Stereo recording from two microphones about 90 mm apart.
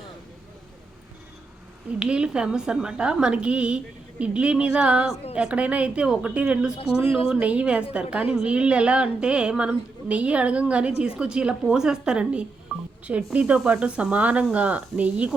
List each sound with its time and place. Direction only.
1.9 s a woman's voice: 10° right (ahead or behind)
6.7 s speech: 90° left
7.3 s a woman's voice: 15° right (ahead or behind)
12.7 s telephone dialing: 5° right (ahead or behind)
13.1 s a woman's voice: 15° right (ahead or behind)